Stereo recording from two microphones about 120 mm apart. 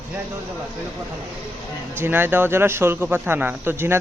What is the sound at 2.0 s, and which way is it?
A man's voice, 15° right (ahead or behind).